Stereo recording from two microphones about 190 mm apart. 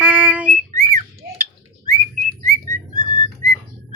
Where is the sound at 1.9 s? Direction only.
40° right (ahead or behind).